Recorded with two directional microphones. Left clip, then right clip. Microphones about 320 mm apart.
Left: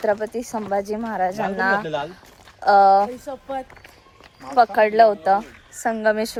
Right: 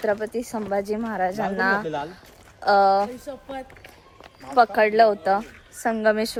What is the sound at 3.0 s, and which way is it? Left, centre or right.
Speech, centre.